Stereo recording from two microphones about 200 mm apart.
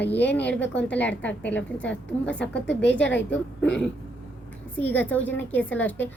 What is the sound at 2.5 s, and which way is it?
Speech, 60° left (ahead or behind).